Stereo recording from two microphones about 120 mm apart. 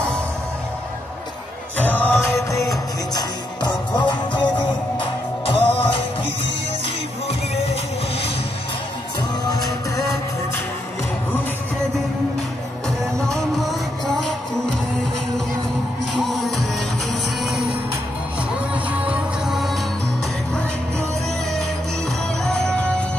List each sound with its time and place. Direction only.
1.8 s music: 15° left (ahead or behind); by 6.0 s 50° left (ahead or behind)
13.3 s music: centre (ahead or behind)
16.1 s music: centre (ahead or behind)
18.7 s music: 10° right (ahead or behind)
22.4 s music: 5° left (ahead or behind)